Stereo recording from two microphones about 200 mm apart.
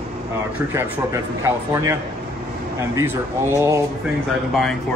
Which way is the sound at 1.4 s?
15° right (ahead or behind).